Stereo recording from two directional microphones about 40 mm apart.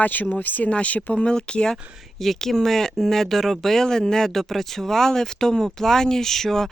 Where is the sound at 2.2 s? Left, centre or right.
Centre.